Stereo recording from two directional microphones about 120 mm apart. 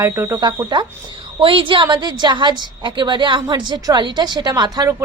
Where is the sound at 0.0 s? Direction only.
25° right (ahead or behind).